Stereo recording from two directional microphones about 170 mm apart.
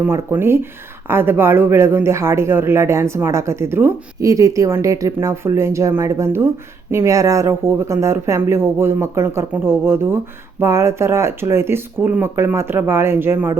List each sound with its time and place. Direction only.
0.0 s speech: 15° right (ahead or behind)